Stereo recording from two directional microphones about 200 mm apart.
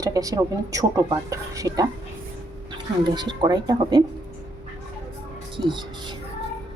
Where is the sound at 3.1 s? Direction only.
20° right (ahead or behind).